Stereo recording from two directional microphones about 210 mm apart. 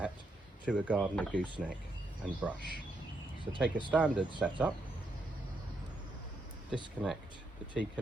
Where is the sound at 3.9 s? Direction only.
5° right (ahead or behind).